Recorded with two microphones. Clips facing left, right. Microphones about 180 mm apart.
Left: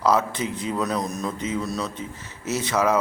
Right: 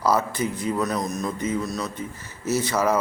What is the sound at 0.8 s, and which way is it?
Speech, 10° left (ahead or behind).